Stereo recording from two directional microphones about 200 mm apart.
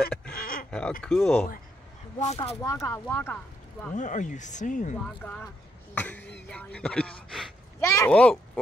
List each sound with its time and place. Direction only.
0.7 s speech: 5° left (ahead or behind)
2.1 s speech: 30° left (ahead or behind)
2.6 s speech: 15° left (ahead or behind)
3.9 s speech: 40° left (ahead or behind)
5.0 s speech: 5° left (ahead or behind)